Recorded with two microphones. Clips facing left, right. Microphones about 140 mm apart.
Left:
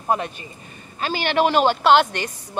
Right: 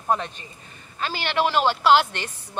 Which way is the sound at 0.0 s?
10° left (ahead or behind).